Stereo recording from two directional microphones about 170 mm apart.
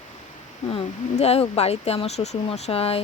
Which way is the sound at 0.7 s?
35° left (ahead or behind).